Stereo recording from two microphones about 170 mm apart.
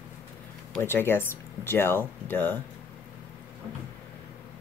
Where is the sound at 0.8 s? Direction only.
15° left (ahead or behind).